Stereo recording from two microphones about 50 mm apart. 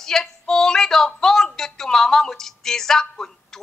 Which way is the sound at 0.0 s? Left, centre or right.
Centre.